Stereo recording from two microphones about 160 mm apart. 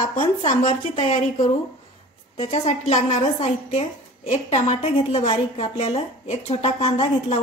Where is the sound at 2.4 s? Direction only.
40° left (ahead or behind).